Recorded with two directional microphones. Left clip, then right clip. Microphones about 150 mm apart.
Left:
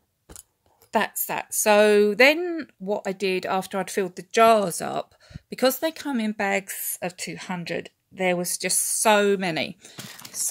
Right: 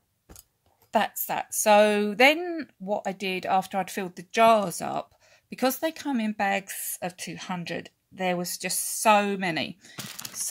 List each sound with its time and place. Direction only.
0.9 s speech: 25° left (ahead or behind)
9.9 s whispering: centre (ahead or behind)